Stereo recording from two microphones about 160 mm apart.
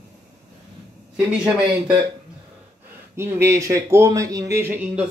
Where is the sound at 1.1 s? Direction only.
5° right (ahead or behind).